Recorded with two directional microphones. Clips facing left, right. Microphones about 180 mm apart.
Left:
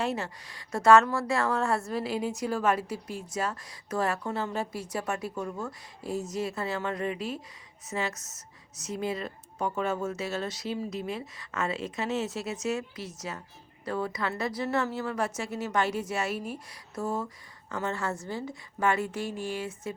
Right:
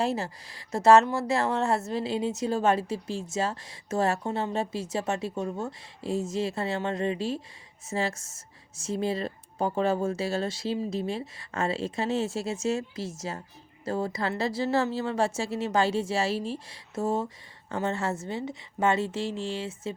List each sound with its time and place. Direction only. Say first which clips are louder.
0.0 s speech: right 3 dB; 30° right (ahead or behind)